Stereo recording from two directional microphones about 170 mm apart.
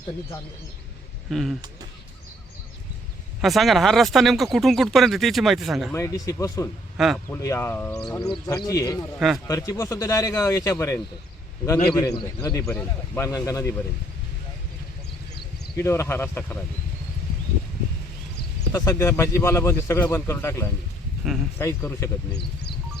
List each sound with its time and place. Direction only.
1.3 s speech: centre (ahead or behind)
3.4 s speech: centre (ahead or behind)
5.9 s speech: 20° left (ahead or behind)
6.9 s speech: centre (ahead or behind)
7.3 s speech: 20° left (ahead or behind)
8.2 s speech: 20° left (ahead or behind)
9.1 s speech: 5° right (ahead or behind)
9.5 s speech: 20° left (ahead or behind)
15.7 s speech: 15° left (ahead or behind)
18.7 s speech: 15° left (ahead or behind)